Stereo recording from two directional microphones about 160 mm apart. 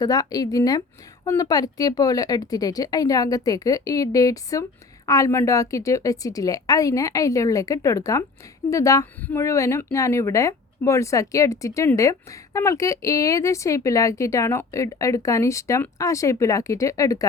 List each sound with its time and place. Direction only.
0.0 s speech: 25° left (ahead or behind)